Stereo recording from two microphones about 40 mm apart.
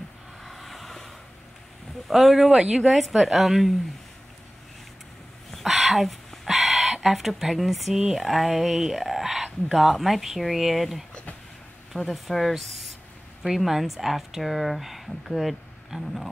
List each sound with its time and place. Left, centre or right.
0.4 s vehicle: centre
2.0 s speech: centre
2.6 s a woman's voice: right
2.9 s speech: centre
5.5 s a sound: centre
8.1 s speech: centre